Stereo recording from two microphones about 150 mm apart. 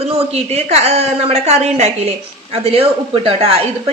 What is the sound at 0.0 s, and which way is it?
A woman's voice, 40° right (ahead or behind).